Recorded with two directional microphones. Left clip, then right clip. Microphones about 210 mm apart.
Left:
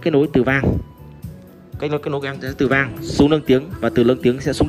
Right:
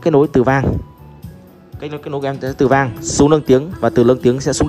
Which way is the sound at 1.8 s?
10° right (ahead or behind).